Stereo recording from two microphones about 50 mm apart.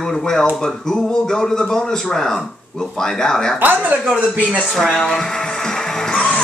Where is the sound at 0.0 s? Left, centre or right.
Centre.